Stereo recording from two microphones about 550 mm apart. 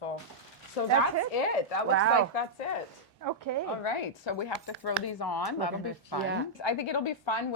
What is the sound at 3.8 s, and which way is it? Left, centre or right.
A woman's voice, left.